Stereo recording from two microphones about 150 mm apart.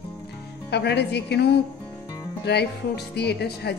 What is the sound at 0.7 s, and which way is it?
Speech, 90° left.